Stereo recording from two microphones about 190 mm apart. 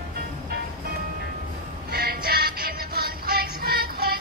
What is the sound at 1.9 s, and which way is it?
Music, 55° right (ahead or behind).